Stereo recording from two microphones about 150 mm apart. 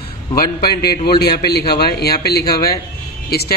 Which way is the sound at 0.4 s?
90° left.